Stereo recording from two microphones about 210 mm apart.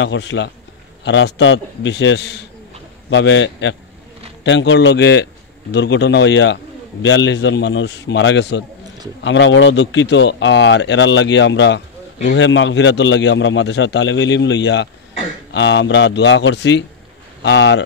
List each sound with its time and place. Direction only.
0.0 s a man's voice: 60° left (ahead or behind)